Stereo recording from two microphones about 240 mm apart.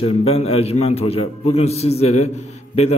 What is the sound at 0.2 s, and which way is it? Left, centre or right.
A man's voice, left.